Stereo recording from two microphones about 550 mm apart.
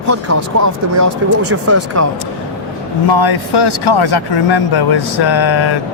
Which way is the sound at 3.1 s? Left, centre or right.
Left.